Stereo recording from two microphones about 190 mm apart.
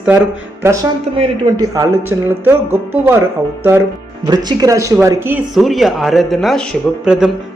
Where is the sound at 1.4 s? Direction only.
20° right (ahead or behind).